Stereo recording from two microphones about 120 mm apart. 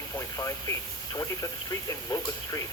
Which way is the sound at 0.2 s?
25° left (ahead or behind).